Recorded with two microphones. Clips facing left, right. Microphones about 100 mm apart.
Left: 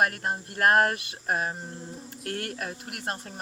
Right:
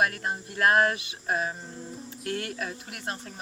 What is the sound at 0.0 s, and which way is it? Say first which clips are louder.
Speech: left 1 dB; 45° left (ahead or behind).